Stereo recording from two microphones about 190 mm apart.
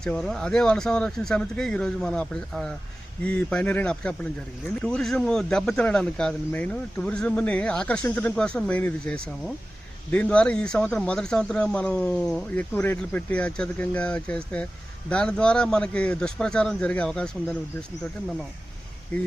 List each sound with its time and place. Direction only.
0.0 s speech: 5° left (ahead or behind)
19.1 s speech: 5° left (ahead or behind)